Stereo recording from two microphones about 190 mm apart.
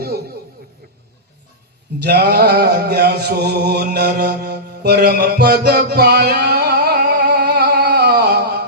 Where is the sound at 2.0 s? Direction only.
55° right (ahead or behind).